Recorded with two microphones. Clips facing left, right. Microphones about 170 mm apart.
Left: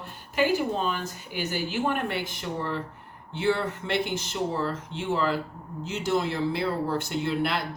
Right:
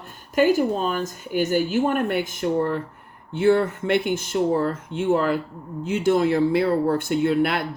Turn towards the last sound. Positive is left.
turn(degrees=-55)  # may be behind; listen again after turning